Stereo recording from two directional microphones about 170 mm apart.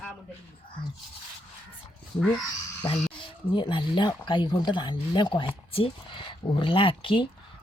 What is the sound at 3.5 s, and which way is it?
Speech, 30° left (ahead or behind).